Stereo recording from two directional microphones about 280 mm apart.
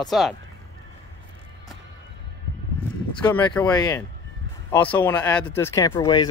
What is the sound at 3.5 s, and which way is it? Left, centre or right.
Speech, centre.